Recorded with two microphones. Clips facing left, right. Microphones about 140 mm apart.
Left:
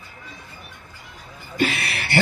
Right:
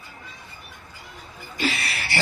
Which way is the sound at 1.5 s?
55° left (ahead or behind).